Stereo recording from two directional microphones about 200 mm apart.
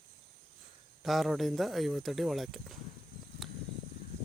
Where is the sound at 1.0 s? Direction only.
Centre (ahead or behind).